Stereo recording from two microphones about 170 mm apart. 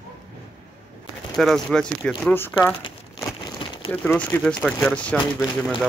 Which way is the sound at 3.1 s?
25° left (ahead or behind).